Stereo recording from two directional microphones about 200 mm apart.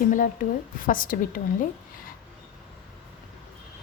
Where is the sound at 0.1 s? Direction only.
40° left (ahead or behind).